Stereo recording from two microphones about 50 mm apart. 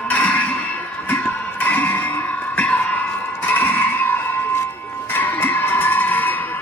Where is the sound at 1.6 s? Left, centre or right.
Left.